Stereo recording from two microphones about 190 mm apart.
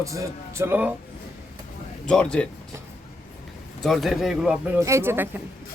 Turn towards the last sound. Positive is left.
turn(degrees=-10)  # may be behind; listen again after turning